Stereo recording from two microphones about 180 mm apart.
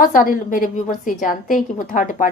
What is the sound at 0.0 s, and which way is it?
A woman's voice, 50° left (ahead or behind).